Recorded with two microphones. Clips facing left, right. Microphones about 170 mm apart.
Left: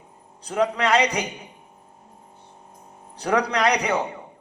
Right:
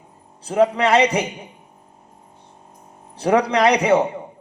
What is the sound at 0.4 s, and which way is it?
Speech, 30° right (ahead or behind).